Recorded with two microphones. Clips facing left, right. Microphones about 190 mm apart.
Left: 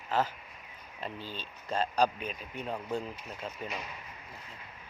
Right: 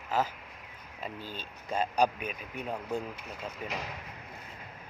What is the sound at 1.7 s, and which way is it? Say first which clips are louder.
Speech: right 1 dB; 10° right (ahead or behind).